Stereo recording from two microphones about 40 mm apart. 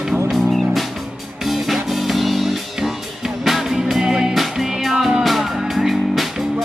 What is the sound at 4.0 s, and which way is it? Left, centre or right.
Music, centre.